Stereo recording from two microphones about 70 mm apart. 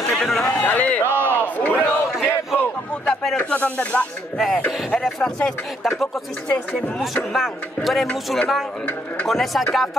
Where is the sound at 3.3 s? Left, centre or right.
Left.